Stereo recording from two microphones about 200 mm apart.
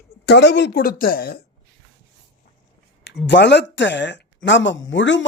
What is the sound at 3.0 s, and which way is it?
A man's voice, 60° left (ahead or behind).